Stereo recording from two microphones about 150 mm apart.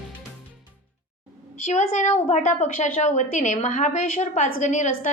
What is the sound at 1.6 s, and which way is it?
A woman's voice, 55° left (ahead or behind).